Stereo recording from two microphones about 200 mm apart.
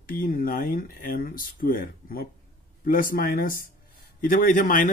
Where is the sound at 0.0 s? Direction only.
45° left (ahead or behind).